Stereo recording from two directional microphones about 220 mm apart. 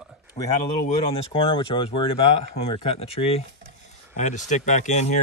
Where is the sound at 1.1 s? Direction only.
25° left (ahead or behind).